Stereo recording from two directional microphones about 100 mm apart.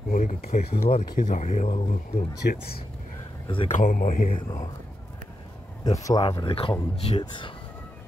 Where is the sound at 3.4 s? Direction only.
60° left (ahead or behind).